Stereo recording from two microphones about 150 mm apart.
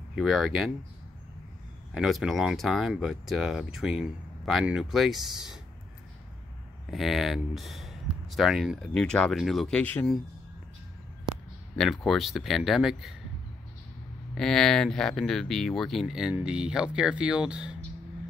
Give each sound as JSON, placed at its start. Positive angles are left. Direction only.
{"t": 0.1, "sound": "speech", "side_deg": 0}
{"t": 2.0, "sound": "speech", "side_deg": 0}
{"t": 6.9, "sound": "speech", "side_deg": 0}
{"t": 11.7, "sound": "speech", "side_deg": 5}
{"t": 14.3, "sound": "speech", "side_deg": 5}